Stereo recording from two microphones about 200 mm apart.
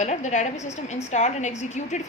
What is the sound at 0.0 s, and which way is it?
A woman's voice, 35° left (ahead or behind).